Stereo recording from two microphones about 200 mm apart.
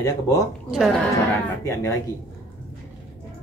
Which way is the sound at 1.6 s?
15° left (ahead or behind).